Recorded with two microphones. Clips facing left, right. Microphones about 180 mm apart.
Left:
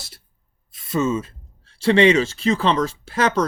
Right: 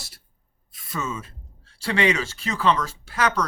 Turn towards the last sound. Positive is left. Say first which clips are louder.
# left 4 dB
turn(degrees=25)  # may be behind; listen again after turning